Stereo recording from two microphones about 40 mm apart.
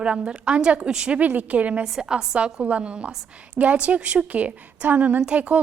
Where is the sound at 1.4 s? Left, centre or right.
Right.